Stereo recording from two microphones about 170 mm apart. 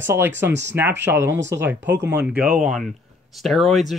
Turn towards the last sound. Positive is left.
turn(degrees=0)  # may be behind; listen again after turning